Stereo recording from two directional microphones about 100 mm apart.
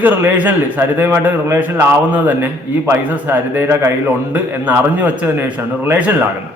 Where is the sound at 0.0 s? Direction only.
20° right (ahead or behind).